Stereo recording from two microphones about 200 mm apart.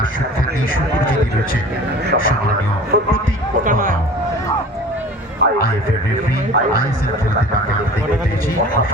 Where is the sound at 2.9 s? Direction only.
55° right (ahead or behind).